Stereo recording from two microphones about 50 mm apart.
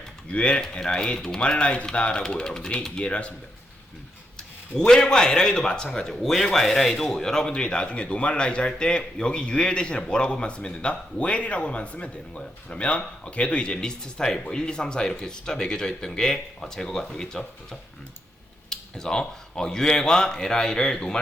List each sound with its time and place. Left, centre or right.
0.3 s speech: left
4.4 s a man's voice: centre